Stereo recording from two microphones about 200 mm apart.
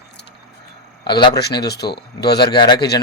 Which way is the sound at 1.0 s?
20° left (ahead or behind).